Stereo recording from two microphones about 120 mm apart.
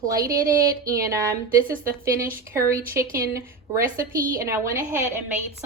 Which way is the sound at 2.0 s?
25° right (ahead or behind).